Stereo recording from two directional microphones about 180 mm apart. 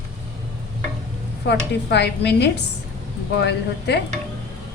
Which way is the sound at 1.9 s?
70° left (ahead or behind).